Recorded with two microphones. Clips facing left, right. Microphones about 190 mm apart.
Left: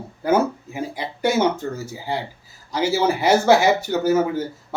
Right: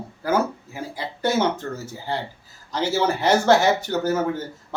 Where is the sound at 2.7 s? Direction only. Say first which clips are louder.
Left 2 dB; 10° left (ahead or behind).